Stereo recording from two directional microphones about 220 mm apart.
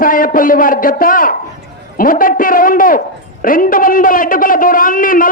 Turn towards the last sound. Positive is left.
turn(degrees=40)  # may be behind; listen again after turning